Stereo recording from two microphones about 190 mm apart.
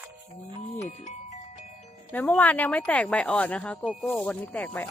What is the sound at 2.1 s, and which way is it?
Speech, 10° left (ahead or behind).